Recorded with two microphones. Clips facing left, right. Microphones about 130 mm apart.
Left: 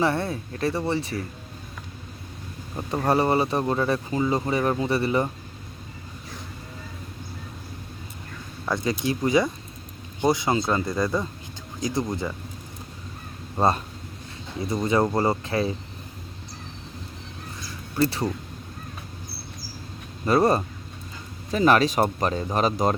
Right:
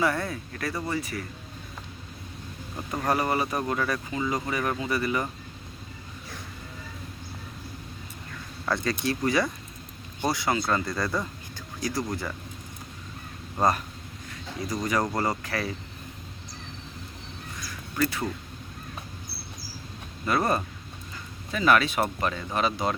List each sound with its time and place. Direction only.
0.0 s speech: 30° left (ahead or behind)
2.9 s speech: 30° left (ahead or behind)
8.6 s speech: 20° left (ahead or behind)
13.6 s speech: 30° left (ahead or behind)
17.6 s crow: 30° left (ahead or behind)
20.2 s speech: 35° left (ahead or behind)